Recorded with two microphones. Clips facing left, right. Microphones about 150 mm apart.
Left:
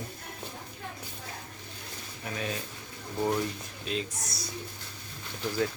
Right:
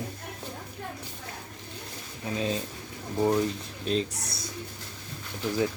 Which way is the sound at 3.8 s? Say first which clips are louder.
Right 6 dB; 35° right (ahead or behind).